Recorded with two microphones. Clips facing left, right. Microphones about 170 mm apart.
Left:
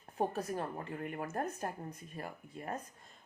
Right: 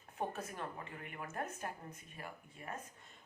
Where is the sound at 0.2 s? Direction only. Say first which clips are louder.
Left 6 dB; 35° left (ahead or behind).